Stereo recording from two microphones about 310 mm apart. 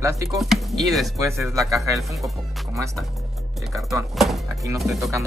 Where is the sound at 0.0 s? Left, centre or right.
Centre.